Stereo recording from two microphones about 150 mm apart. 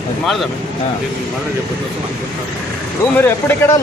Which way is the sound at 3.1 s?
15° left (ahead or behind).